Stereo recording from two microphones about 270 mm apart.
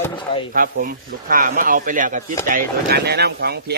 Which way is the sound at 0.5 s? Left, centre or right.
Right.